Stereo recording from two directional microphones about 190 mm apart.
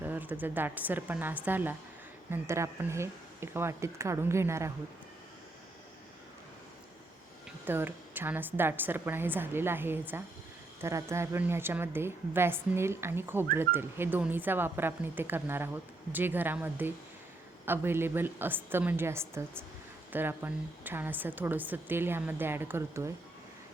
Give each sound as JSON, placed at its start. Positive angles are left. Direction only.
{"t": 0.0, "sound": "a woman's voice", "side_deg": -10}
{"t": 7.7, "sound": "a woman's voice", "side_deg": -10}